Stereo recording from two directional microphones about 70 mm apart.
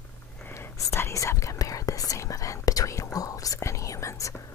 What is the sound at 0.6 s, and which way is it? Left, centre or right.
Whispering, left.